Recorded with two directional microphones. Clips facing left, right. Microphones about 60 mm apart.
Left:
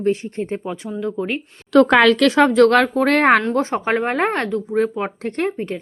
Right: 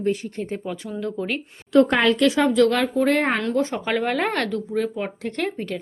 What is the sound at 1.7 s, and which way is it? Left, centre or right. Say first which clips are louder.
Speech: left 5 dB; left.